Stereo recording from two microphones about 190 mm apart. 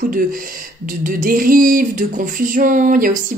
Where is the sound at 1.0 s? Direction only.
50° right (ahead or behind).